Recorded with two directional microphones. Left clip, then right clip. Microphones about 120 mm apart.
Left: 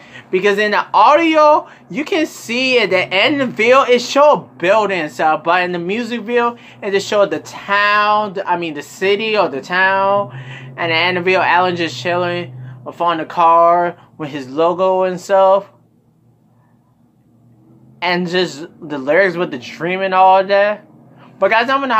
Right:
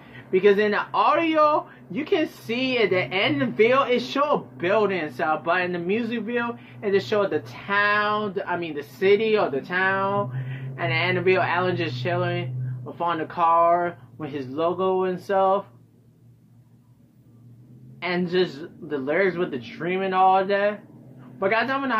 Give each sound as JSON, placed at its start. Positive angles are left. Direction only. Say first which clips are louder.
{"t": 0.3, "sound": "speech", "louder": "left 5 dB", "side_deg": 20}
{"t": 17.9, "sound": "speech", "louder": "left 8 dB", "side_deg": 25}